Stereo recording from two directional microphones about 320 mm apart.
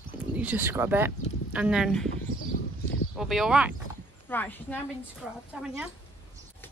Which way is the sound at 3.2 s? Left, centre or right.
Centre.